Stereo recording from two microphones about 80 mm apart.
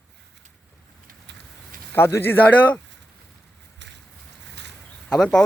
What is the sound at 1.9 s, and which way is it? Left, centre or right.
Speech, left.